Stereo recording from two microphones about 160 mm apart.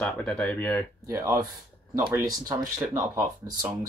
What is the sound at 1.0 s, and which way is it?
Speech, 20° right (ahead or behind).